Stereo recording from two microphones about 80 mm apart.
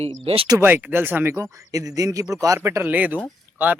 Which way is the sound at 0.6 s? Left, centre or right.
Right.